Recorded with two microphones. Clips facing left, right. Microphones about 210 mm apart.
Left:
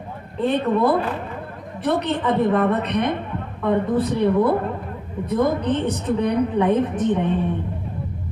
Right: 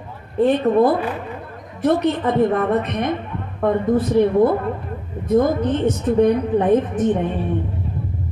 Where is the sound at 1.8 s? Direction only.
45° right (ahead or behind).